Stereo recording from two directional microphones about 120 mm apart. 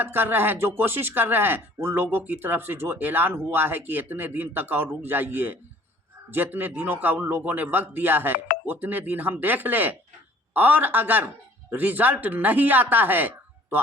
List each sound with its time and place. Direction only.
0.0 s speech: 15° right (ahead or behind)